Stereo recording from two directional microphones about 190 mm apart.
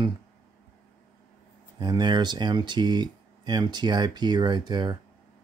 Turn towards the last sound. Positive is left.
turn(degrees=-25)  # may be behind; listen again after turning